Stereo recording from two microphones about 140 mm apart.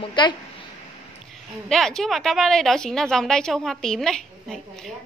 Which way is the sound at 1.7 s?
5° left (ahead or behind).